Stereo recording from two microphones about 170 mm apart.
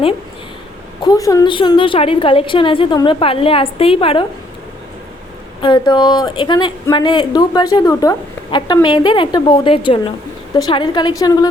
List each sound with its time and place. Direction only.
1.0 s a woman's voice: 20° left (ahead or behind)
5.6 s a woman's voice: 25° left (ahead or behind)